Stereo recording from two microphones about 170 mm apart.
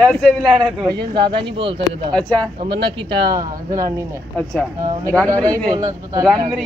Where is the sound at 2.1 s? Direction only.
5° left (ahead or behind).